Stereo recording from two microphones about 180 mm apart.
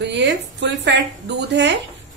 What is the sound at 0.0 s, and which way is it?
A woman's voice, 75° right (ahead or behind).